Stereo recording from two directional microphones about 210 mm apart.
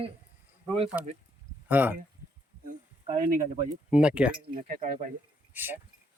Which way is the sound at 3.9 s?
5° right (ahead or behind).